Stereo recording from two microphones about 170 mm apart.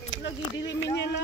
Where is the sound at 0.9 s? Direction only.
90° left.